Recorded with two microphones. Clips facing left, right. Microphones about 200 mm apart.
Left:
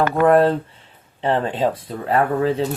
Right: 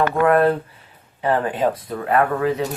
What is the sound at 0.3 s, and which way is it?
Speech, 30° left (ahead or behind).